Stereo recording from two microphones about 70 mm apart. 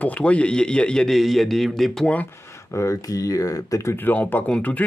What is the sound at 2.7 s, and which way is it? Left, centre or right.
Speech, left.